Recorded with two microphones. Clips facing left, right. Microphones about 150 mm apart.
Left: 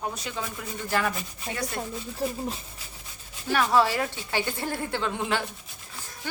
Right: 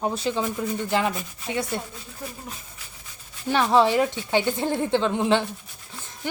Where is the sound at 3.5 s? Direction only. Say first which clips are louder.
Right 3 dB; 20° right (ahead or behind).